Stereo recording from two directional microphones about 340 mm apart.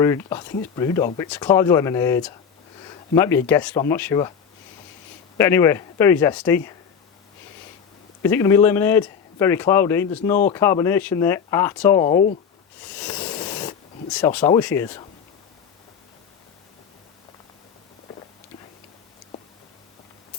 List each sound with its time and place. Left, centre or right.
0.0 s a man's voice: centre
5.4 s a man's voice: centre
8.2 s a man's voice: centre
12.8 s a sound: centre